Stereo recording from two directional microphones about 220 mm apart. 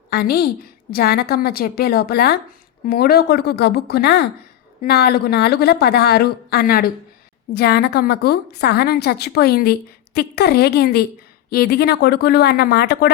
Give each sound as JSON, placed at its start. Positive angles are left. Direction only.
{"t": 0.1, "sound": "a woman's voice", "side_deg": 45}